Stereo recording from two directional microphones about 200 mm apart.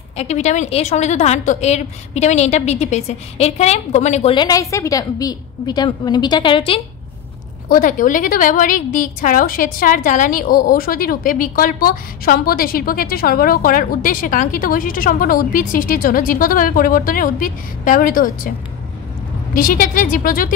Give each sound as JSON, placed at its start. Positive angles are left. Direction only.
{"t": 0.2, "sound": "a woman's voice", "side_deg": 35}
{"t": 7.6, "sound": "a woman's voice", "side_deg": 45}
{"t": 19.5, "sound": "a woman's voice", "side_deg": 45}